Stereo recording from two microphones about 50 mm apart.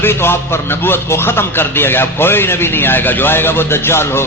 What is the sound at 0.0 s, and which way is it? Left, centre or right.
A man's voice, left.